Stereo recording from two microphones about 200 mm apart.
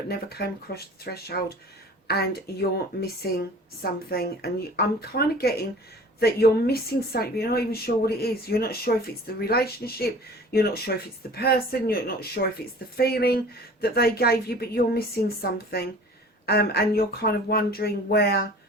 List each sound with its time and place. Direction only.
0.1 s a woman's voice: 50° left (ahead or behind)